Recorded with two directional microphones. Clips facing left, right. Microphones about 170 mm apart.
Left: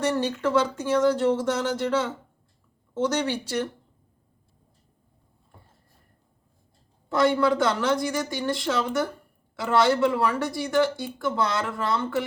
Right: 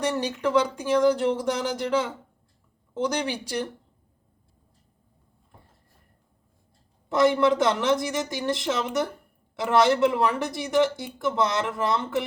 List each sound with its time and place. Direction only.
0.0 s speech: 15° right (ahead or behind)
7.1 s speech: 20° right (ahead or behind)